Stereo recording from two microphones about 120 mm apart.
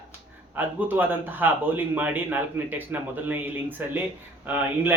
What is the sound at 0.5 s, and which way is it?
Speech, 15° right (ahead or behind).